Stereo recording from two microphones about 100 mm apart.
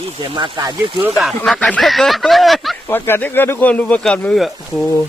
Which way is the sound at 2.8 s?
20° left (ahead or behind).